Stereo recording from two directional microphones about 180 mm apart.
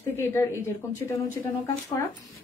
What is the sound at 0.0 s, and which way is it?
Speech, 15° left (ahead or behind).